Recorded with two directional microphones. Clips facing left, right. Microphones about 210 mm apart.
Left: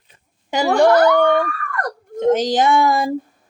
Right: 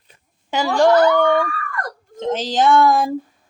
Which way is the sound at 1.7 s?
60° left (ahead or behind).